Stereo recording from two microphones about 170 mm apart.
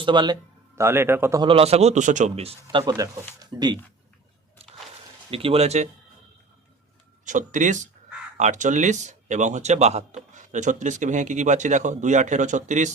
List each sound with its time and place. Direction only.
0.0 s speech: 25° right (ahead or behind)
0.8 s speech: 15° right (ahead or behind)
1.4 s a man's voice: 35° right (ahead or behind)
5.3 s a man's voice: 35° right (ahead or behind)
7.3 s speech: 45° right (ahead or behind)